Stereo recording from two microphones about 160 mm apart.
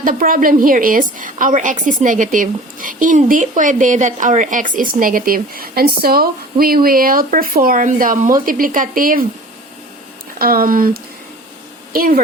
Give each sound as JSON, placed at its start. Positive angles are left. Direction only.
{"t": 0.0, "sound": "a woman's voice", "side_deg": -60}
{"t": 10.3, "sound": "a woman's voice", "side_deg": -65}